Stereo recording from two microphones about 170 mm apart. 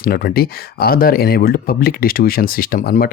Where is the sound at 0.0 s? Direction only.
60° left (ahead or behind).